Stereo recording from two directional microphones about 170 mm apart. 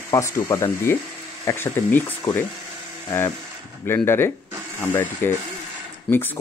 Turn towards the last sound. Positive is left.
turn(degrees=15)  # may be behind; listen again after turning